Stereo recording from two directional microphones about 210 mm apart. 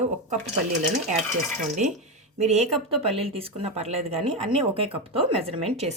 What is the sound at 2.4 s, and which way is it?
Speech, 30° right (ahead or behind).